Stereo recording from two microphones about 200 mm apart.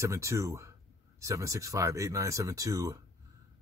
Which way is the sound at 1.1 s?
15° right (ahead or behind).